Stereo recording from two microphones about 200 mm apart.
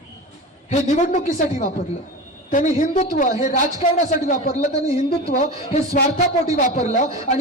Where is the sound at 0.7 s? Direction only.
40° left (ahead or behind).